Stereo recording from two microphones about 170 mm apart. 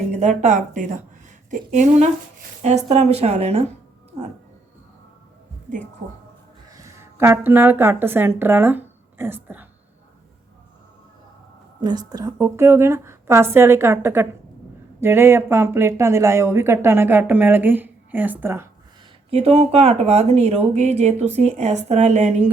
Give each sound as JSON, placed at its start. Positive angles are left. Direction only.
{"t": 0.1, "sound": "speech", "side_deg": -45}
{"t": 6.7, "sound": "speech", "side_deg": -15}
{"t": 11.8, "sound": "speech", "side_deg": -25}
{"t": 19.3, "sound": "speech", "side_deg": -35}